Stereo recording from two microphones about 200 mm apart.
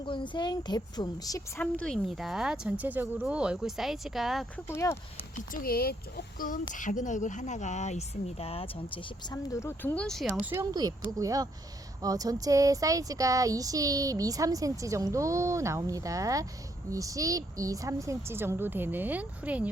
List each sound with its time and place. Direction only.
0.1 s speech: 25° left (ahead or behind)
1.6 s speech: 5° left (ahead or behind)
4.7 s speech: 10° left (ahead or behind)
5.5 s speech: 45° left (ahead or behind); by 10.5 s centre (ahead or behind)
10.5 s a sound: 15° right (ahead or behind)